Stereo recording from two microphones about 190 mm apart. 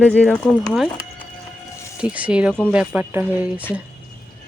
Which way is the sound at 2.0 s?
5° right (ahead or behind).